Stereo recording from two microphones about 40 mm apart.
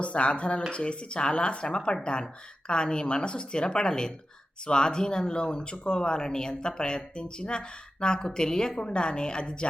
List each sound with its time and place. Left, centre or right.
0.0 s speech: left